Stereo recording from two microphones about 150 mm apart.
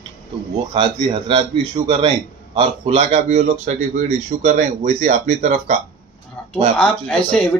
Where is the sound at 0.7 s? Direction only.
35° right (ahead or behind); by 5.8 s 55° right (ahead or behind).